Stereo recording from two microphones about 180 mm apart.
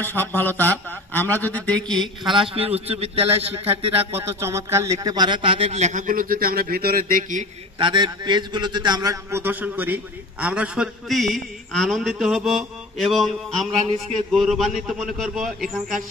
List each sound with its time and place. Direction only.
0.0 s speech: 10° left (ahead or behind)
2.5 s speech: 35° right (ahead or behind)
4.1 s speech: 15° right (ahead or behind); by 7.4 s 50° right (ahead or behind)
7.8 s a man's voice: 25° right (ahead or behind); by 15.8 s centre (ahead or behind)